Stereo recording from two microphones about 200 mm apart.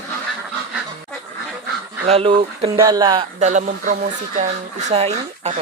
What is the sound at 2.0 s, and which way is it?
Speech, 30° right (ahead or behind).